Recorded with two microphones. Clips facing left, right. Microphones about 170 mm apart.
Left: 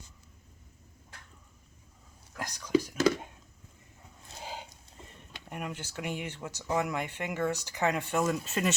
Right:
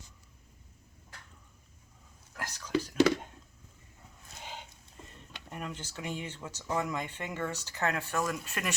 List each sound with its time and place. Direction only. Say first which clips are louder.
2.4 s whispering: left 5 dB; 15° left (ahead or behind)
4.4 s a sound: left 4 dB; 40° left (ahead or behind)
5.5 s speech: left 2 dB; 10° left (ahead or behind)